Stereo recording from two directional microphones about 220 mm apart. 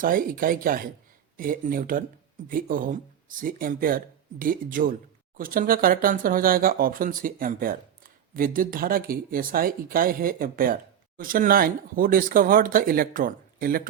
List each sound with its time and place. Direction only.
0.0 s speech: 40° right (ahead or behind)